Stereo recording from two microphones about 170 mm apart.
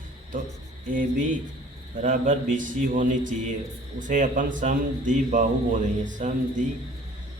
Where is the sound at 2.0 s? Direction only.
50° right (ahead or behind).